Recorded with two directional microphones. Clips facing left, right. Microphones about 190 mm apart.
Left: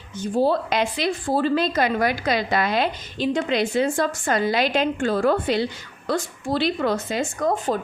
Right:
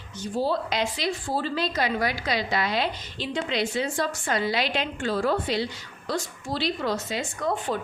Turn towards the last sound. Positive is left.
turn(degrees=40)  # may be behind; listen again after turning